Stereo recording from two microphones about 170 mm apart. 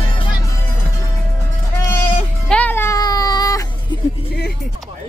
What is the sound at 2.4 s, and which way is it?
Baby cry, 10° left (ahead or behind).